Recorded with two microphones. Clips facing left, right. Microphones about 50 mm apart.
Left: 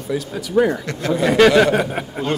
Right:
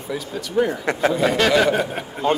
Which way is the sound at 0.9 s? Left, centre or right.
Right.